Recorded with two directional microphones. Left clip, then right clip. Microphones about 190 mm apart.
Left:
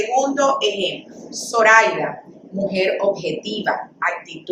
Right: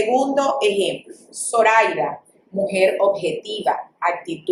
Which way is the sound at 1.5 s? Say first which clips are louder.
Left 2 dB; 15° right (ahead or behind).